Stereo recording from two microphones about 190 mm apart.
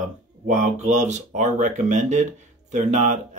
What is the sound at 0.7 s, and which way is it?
Speech, 40° right (ahead or behind).